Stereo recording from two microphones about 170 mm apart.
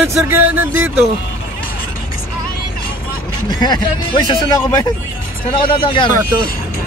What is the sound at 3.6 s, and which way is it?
Speech, 25° left (ahead or behind).